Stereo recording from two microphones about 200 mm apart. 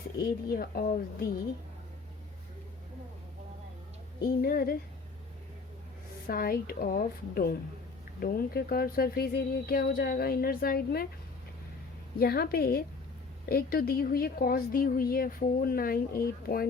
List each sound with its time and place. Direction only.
0.2 s a woman's voice: 50° left (ahead or behind)
4.2 s a woman's voice: 50° left (ahead or behind)
6.2 s a woman's voice: 50° left (ahead or behind)
12.2 s a woman's voice: 50° left (ahead or behind)